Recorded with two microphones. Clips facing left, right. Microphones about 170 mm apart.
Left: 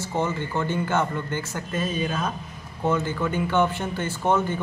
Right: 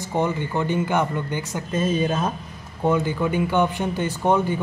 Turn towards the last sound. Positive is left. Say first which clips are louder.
# right 3 dB
turn(degrees=-15)  # may be behind; listen again after turning